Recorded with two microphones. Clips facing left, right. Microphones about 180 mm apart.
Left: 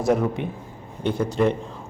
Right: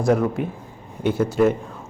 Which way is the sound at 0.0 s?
Centre (ahead or behind).